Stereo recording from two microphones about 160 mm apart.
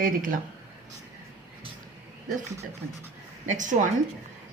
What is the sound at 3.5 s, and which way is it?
Speech, 50° right (ahead or behind).